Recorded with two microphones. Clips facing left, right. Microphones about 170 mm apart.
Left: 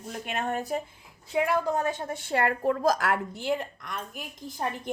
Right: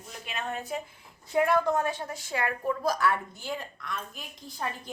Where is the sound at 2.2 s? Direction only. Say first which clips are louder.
Left 6 dB; 60° left (ahead or behind); by 3.5 s 80° left.